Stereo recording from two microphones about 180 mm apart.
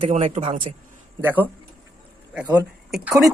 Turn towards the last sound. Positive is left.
turn(degrees=0)  # may be behind; listen again after turning